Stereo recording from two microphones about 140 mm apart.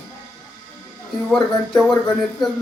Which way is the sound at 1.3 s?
5° left (ahead or behind).